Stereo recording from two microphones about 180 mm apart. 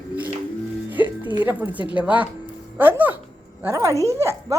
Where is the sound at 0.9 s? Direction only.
10° right (ahead or behind).